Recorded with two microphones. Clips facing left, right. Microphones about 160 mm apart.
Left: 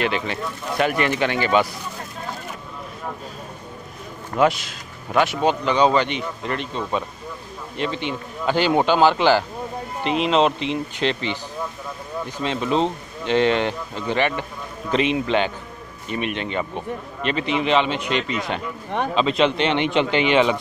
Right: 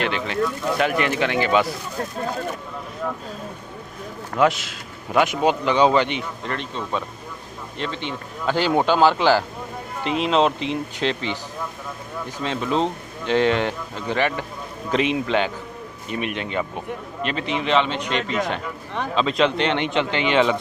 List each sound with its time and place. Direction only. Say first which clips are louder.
0.0 s speech: right 1 dB; centre (ahead or behind)
4.4 s speech: even; centre (ahead or behind)
5.2 s speech: even; 15° right (ahead or behind)
6.4 s speech: left 2 dB; 10° left (ahead or behind)
12.4 s speech: left 1 dB; centre (ahead or behind)
19.1 s speech: even; 5° left (ahead or behind)
19.5 s speech: left 2 dB; 20° left (ahead or behind)